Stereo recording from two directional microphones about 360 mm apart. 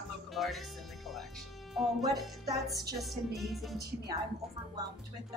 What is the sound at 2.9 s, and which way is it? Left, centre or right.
Speech, centre.